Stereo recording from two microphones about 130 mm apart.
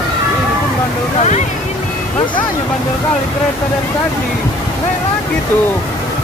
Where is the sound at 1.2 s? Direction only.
60° left (ahead or behind).